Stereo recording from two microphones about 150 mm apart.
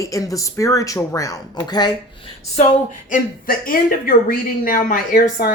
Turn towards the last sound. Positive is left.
turn(degrees=70)  # may be behind; listen again after turning